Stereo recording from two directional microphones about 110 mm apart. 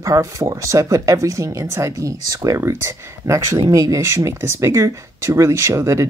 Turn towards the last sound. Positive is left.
turn(degrees=-25)  # may be behind; listen again after turning